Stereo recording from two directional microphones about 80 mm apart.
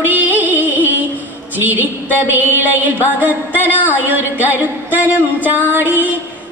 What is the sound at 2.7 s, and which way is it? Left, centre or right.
Music, right.